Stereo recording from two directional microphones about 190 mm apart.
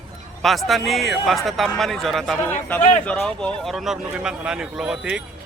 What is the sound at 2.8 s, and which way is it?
Speech, 40° left (ahead or behind).